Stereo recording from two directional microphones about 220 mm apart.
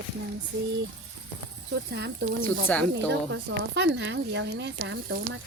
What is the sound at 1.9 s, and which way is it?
Speech, 50° right (ahead or behind).